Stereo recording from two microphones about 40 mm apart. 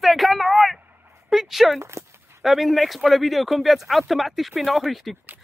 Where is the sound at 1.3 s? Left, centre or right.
Centre.